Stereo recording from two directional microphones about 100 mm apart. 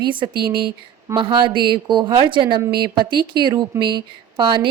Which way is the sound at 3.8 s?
55° right (ahead or behind).